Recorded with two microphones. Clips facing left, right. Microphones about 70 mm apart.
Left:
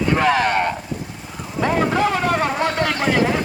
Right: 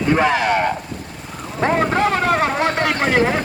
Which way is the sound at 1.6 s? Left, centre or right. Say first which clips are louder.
Right 1 dB; right.